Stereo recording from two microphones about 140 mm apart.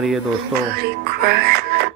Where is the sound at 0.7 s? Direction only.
90° right.